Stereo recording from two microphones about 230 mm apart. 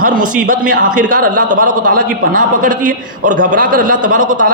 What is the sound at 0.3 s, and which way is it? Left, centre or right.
A man's voice, right.